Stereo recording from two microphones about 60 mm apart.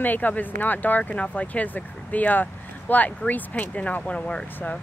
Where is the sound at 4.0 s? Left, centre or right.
Centre.